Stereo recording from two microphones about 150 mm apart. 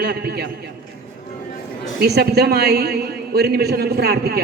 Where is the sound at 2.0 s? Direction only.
90° right.